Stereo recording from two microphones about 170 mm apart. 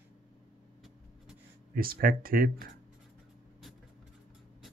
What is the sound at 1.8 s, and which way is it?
Speech, 60° right (ahead or behind).